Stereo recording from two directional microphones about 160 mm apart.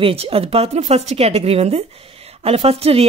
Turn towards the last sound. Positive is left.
turn(degrees=-40)  # may be behind; listen again after turning